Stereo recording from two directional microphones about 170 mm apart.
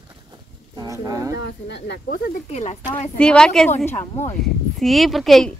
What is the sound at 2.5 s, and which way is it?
Speech, 40° left (ahead or behind).